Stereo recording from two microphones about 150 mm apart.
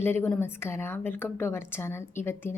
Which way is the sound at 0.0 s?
15° left (ahead or behind).